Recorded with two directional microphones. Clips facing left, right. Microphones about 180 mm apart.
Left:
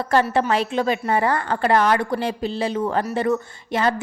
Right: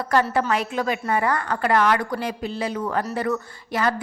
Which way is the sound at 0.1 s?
25° left (ahead or behind).